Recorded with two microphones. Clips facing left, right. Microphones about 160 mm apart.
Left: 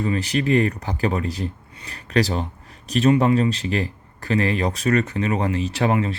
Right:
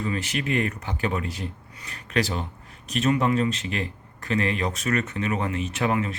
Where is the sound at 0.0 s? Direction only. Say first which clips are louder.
Left 6 dB; 35° left (ahead or behind).